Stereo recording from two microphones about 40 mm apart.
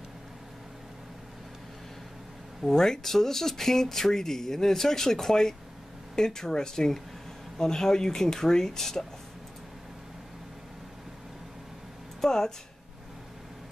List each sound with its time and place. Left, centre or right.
2.6 s speech: centre
12.2 s speech: centre